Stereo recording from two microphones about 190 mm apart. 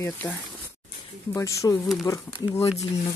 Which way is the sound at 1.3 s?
15° left (ahead or behind).